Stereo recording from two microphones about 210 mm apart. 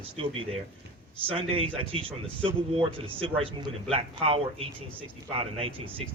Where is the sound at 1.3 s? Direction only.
25° right (ahead or behind).